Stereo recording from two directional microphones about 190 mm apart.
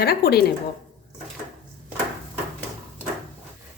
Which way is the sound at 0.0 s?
55° left (ahead or behind).